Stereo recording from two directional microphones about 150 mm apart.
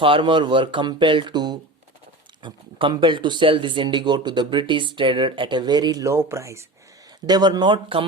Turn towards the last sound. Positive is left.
turn(degrees=-30)  # may be behind; listen again after turning